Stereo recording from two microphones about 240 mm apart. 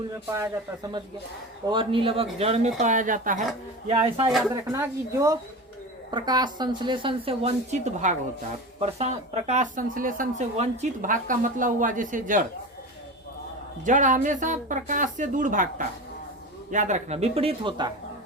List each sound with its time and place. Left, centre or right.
0.3 s a woman's voice: centre
4.3 s speech: centre
4.5 s a woman's voice: centre; by 12.5 s right
13.8 s speech: right
16.7 s a woman's voice: right